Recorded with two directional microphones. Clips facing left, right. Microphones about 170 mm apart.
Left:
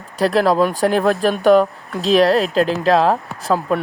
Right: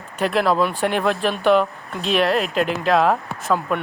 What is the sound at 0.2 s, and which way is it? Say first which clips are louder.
Speech: left 4 dB; 40° left (ahead or behind).